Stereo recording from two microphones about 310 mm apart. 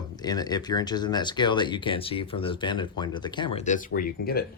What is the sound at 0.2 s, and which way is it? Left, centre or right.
Speech, centre.